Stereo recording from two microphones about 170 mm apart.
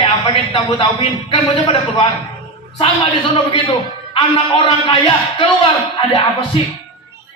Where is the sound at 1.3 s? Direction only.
30° left (ahead or behind).